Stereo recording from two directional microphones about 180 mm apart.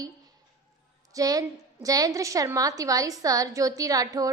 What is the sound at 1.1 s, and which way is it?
A woman's voice, 20° right (ahead or behind).